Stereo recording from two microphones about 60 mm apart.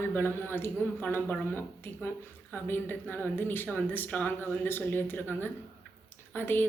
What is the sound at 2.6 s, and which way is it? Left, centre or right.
Speech, left.